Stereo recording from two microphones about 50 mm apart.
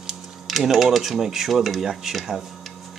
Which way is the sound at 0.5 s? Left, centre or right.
Centre.